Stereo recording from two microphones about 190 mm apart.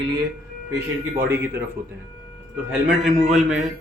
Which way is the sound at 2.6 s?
5° right (ahead or behind).